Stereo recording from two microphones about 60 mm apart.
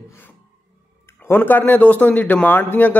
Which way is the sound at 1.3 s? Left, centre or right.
Left.